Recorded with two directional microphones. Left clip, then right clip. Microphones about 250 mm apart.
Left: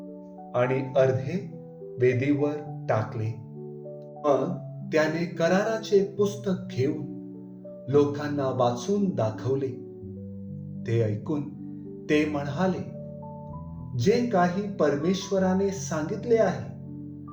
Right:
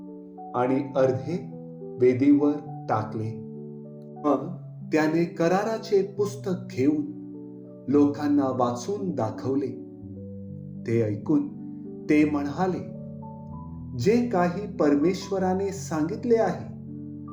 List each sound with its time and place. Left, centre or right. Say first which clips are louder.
0.5 s speech: left 1 dB; right
4.9 s speech: right 1 dB; right
7.9 s speech: right 1 dB; right
10.8 s speech: right 3 dB; right
14.0 s speech: even; right